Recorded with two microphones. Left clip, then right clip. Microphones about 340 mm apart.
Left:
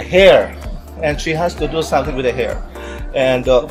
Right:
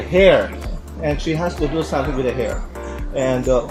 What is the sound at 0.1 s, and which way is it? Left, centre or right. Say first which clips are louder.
Speech: left 4 dB; left.